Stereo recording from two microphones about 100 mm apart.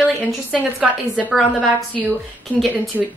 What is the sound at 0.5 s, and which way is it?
Speech, centre (ahead or behind).